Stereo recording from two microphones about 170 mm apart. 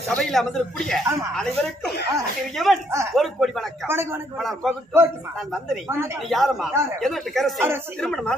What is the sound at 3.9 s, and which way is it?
Speech, 15° right (ahead or behind).